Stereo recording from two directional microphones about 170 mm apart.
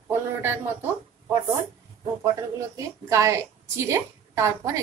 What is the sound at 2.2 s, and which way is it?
A woman's voice, 20° right (ahead or behind).